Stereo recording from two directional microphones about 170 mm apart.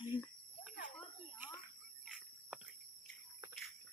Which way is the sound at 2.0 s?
5° right (ahead or behind).